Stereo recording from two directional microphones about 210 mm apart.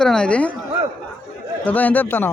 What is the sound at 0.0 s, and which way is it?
Speech, 5° left (ahead or behind).